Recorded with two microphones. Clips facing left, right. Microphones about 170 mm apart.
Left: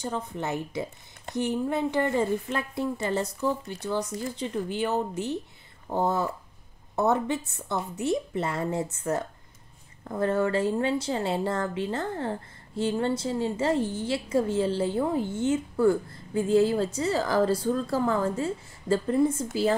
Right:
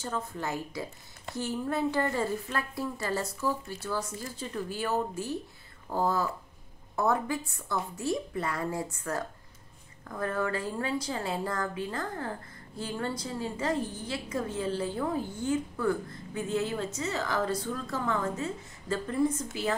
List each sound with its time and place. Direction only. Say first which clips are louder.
0.0 s a woman's voice: left 3 dB; 20° left (ahead or behind)